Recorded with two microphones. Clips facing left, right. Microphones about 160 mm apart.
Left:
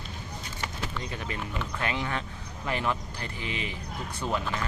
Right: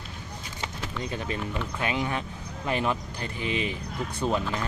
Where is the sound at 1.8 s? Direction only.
15° right (ahead or behind).